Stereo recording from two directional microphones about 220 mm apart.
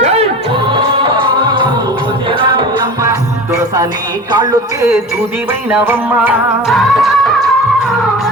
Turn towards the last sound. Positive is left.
turn(degrees=0)  # may be behind; listen again after turning